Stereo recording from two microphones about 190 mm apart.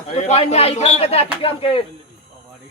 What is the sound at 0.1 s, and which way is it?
A man's voice, 35° left (ahead or behind).